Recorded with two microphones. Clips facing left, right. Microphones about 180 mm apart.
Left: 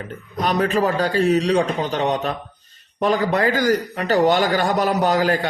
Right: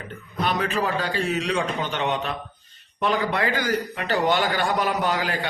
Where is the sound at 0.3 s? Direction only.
40° left (ahead or behind).